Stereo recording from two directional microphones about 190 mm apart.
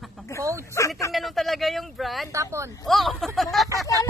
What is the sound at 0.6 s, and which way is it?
Speech, 15° left (ahead or behind).